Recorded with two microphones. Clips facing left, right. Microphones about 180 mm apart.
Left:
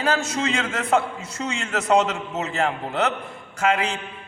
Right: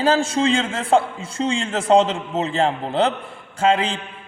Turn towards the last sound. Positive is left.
turn(degrees=-30)  # may be behind; listen again after turning